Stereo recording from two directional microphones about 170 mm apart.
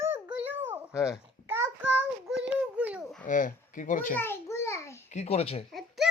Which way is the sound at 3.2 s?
50° left (ahead or behind).